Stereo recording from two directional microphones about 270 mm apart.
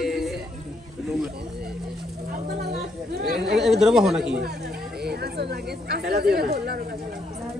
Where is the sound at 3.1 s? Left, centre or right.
Right.